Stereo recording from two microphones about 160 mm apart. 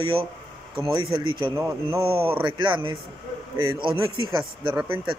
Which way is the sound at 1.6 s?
15° right (ahead or behind).